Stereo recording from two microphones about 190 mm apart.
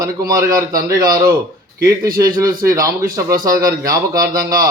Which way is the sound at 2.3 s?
50° right (ahead or behind).